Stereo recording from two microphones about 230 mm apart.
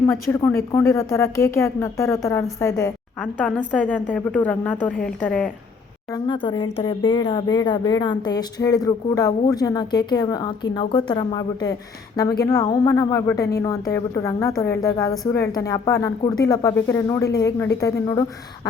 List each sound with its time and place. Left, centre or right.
0.1 s a woman's voice: centre
6.1 s speech: left
15.1 s a woman's voice: centre
15.4 s speech: centre